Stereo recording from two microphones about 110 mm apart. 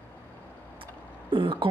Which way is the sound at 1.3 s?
50° right (ahead or behind).